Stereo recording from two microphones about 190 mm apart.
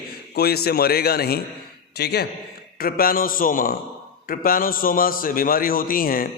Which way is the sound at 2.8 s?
50° left (ahead or behind).